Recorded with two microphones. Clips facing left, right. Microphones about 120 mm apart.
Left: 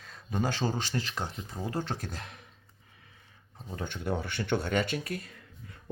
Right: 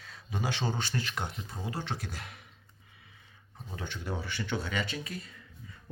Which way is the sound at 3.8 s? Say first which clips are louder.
Left 5 dB; 50° left (ahead or behind).